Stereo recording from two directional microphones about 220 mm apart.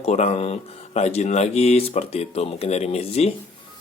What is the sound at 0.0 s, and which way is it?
Speech, 30° left (ahead or behind).